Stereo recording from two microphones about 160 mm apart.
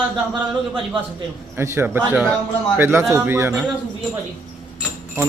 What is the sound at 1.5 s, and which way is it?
A man's voice, 15° right (ahead or behind).